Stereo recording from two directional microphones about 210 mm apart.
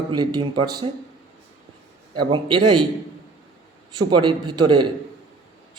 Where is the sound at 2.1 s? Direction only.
20° right (ahead or behind).